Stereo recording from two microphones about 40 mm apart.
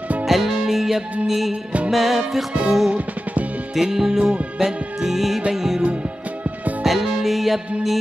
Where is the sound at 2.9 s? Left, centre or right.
Right.